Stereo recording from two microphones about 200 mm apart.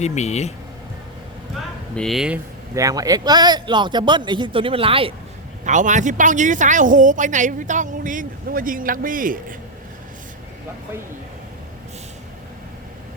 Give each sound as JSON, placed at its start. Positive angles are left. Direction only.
{"t": 0.0, "sound": "speech", "side_deg": 35}
{"t": 2.0, "sound": "speech", "side_deg": 0}
{"t": 2.7, "sound": "speech", "side_deg": -15}
{"t": 5.6, "sound": "a woman's voice", "side_deg": -40}